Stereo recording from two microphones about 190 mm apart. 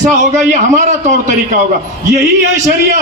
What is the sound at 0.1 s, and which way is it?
A man's voice, 40° right (ahead or behind).